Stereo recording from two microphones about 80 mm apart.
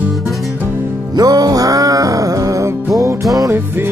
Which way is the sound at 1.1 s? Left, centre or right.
Right.